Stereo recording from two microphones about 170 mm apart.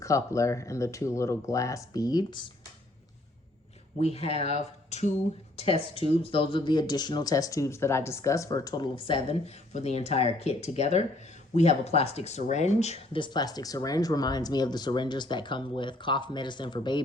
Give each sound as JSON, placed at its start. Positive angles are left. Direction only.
{"t": 0.0, "sound": "speech", "side_deg": 20}
{"t": 4.0, "sound": "speech", "side_deg": 35}